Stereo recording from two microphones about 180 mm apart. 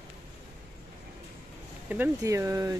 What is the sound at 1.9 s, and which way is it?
Speech, 15° right (ahead or behind).